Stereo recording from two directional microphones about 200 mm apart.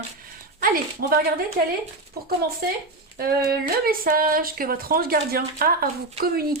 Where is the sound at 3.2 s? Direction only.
50° right (ahead or behind).